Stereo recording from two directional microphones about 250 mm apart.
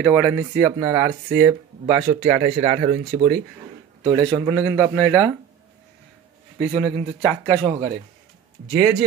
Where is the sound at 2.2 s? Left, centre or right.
Right.